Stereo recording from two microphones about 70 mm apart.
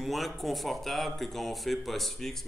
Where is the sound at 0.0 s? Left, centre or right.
Centre.